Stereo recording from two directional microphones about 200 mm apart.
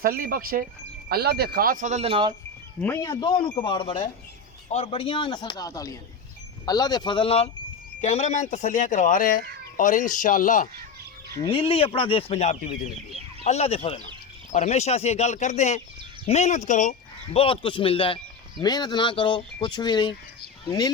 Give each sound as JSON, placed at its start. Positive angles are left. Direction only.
{"t": 0.0, "sound": "speech", "side_deg": -45}
{"t": 2.8, "sound": "speech", "side_deg": 15}
{"t": 11.3, "sound": "speech", "side_deg": 25}
{"t": 17.3, "sound": "speech", "side_deg": 25}